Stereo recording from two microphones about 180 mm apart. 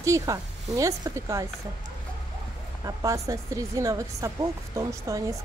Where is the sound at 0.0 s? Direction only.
20° right (ahead or behind).